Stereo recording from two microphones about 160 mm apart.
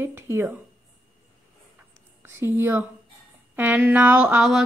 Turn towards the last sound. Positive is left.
turn(degrees=-5)  # may be behind; listen again after turning